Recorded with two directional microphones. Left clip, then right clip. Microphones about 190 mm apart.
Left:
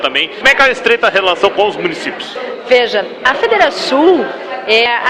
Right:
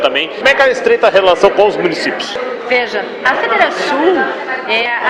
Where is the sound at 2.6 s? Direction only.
45° left (ahead or behind).